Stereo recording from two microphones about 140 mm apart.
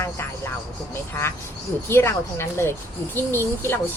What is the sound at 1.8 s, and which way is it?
A woman's voice, 20° left (ahead or behind).